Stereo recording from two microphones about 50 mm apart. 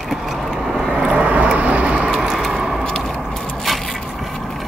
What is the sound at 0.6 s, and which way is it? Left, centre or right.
Vehicle, centre.